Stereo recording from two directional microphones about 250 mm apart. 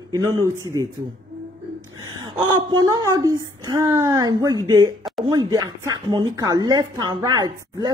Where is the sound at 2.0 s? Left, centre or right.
Centre.